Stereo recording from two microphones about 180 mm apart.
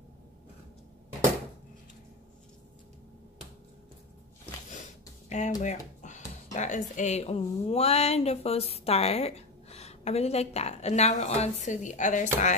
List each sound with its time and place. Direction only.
5.3 s speech: 40° left (ahead or behind)